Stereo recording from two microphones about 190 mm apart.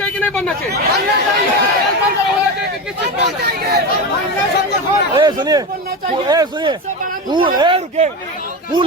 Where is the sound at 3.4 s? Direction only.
60° right (ahead or behind).